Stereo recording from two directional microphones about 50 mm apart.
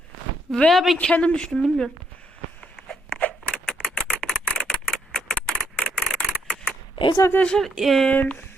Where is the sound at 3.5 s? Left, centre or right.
Centre.